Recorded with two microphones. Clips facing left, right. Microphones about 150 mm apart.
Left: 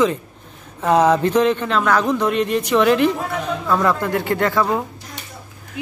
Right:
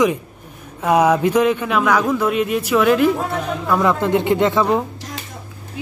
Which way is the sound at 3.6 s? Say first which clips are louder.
Right 2 dB; 15° right (ahead or behind).